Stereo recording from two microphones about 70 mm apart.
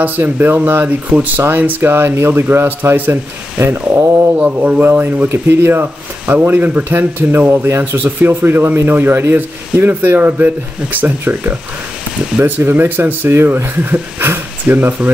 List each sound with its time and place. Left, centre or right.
0.0 s speech: right
4.4 s speech: right